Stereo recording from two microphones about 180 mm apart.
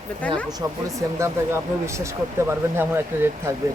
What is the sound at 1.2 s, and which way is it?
Speech, 15° right (ahead or behind).